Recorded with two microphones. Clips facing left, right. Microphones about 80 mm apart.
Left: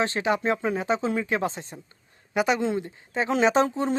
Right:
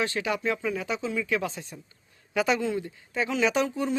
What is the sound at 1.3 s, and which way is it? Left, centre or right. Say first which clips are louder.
Speech: left 2 dB; left.